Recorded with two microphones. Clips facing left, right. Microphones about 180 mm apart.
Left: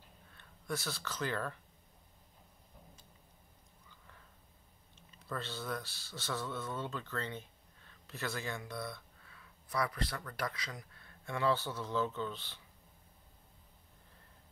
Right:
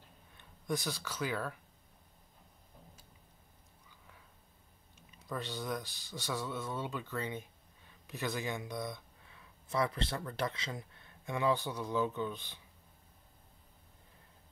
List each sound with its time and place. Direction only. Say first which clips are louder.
0.4 s speech: right 3 dB; 15° right (ahead or behind)
5.3 s speech: right 2 dB; 15° right (ahead or behind)